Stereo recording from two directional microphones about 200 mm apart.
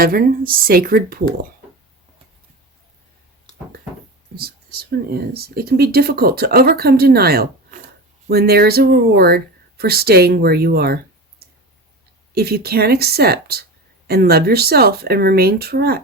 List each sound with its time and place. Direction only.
0.0 s speech: 45° right (ahead or behind)
4.4 s speech: 50° right (ahead or behind)
12.3 s speech: 50° right (ahead or behind)